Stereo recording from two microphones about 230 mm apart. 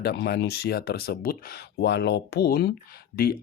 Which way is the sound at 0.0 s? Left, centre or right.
Left.